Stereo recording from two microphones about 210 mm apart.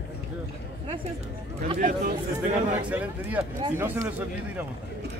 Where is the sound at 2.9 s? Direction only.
5° right (ahead or behind).